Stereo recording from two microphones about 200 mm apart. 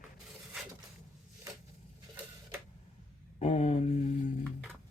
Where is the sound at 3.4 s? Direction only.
35° left (ahead or behind).